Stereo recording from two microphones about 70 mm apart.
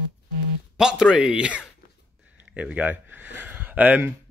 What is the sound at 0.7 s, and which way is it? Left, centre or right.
A man's voice, centre.